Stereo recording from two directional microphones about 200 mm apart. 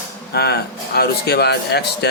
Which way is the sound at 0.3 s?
55° left (ahead or behind).